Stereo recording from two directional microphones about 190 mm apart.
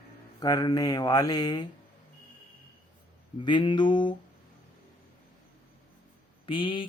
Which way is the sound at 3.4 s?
25° left (ahead or behind).